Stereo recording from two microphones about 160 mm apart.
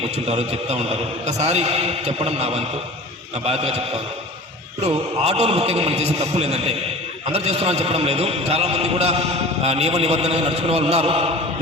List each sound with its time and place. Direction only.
0.3 s a man's voice: 40° right (ahead or behind)
4.8 s a man's voice: 40° right (ahead or behind)